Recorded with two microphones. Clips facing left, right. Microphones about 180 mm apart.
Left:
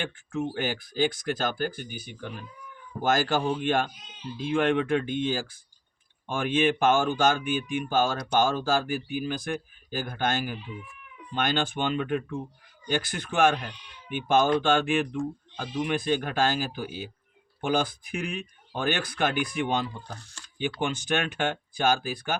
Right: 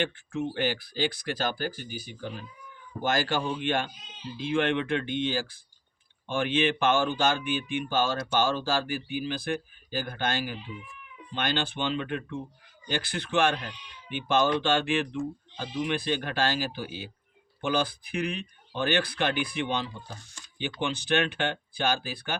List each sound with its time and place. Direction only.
0.0 s speech: 45° left (ahead or behind)